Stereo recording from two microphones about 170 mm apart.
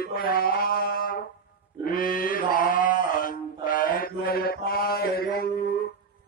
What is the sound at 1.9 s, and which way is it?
Mantra, 55° left (ahead or behind).